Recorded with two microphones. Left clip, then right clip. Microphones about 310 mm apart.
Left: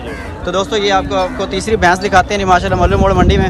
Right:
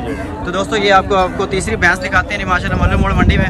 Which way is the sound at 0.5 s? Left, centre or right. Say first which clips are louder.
Right 1 dB; centre.